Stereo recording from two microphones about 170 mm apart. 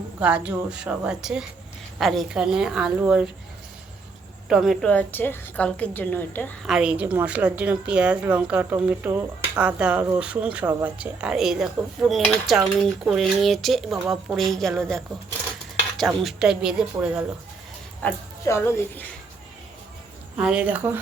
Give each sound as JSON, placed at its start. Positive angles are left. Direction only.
{"t": 0.2, "sound": "a woman's voice", "side_deg": -5}
{"t": 4.4, "sound": "a woman's voice", "side_deg": 0}
{"t": 6.7, "sound": "a woman's voice", "side_deg": -5}
{"t": 16.0, "sound": "a woman's voice", "side_deg": 0}
{"t": 18.0, "sound": "a woman's voice", "side_deg": 15}
{"t": 20.3, "sound": "a woman's voice", "side_deg": -5}